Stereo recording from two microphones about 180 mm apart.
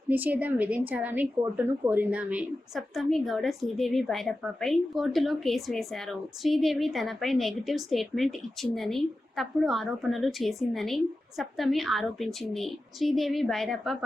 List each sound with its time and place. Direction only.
0.1 s speech: 10° right (ahead or behind)